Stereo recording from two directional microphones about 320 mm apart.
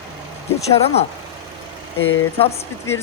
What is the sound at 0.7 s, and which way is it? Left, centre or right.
Speech, centre.